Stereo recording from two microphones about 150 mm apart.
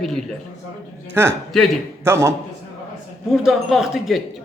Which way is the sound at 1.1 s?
15° right (ahead or behind).